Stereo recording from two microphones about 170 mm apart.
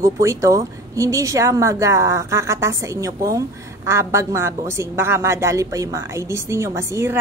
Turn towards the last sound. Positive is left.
turn(degrees=-15)  # may be behind; listen again after turning